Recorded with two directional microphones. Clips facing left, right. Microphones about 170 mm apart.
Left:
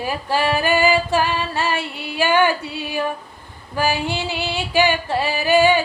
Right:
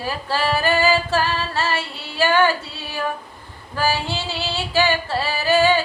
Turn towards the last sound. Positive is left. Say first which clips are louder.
# left 2 dB
turn(degrees=15)  # may be behind; listen again after turning